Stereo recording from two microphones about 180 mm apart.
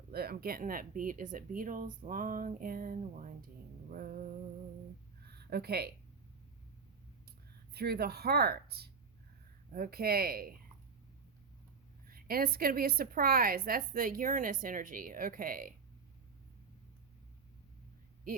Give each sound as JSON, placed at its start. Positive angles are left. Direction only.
{"t": 0.1, "sound": "a woman's voice", "side_deg": -60}
{"t": 3.9, "sound": "a sound", "side_deg": -55}
{"t": 7.7, "sound": "speech", "side_deg": -60}
{"t": 12.0, "sound": "a woman's voice", "side_deg": -55}